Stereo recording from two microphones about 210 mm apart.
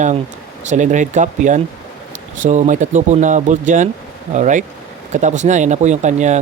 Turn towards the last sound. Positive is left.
turn(degrees=-35)  # may be behind; listen again after turning